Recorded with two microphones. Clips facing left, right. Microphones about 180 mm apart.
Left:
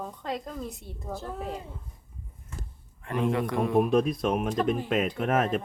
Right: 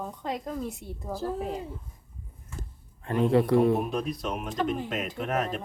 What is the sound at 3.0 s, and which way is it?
Speech, 30° right (ahead or behind).